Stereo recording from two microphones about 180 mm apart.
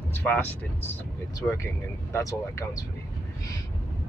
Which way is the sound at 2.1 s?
15° left (ahead or behind).